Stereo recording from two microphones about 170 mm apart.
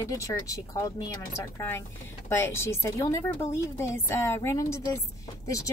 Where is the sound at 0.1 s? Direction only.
20° left (ahead or behind).